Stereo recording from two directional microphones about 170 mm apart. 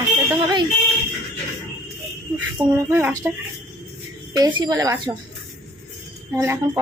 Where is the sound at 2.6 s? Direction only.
20° right (ahead or behind).